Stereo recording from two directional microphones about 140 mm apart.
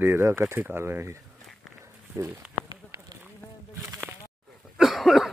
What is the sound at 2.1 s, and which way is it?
Speech, 15° right (ahead or behind).